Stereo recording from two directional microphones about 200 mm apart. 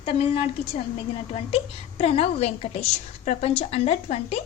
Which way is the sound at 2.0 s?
30° left (ahead or behind).